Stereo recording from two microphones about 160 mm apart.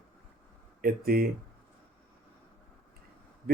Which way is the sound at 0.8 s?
70° right (ahead or behind).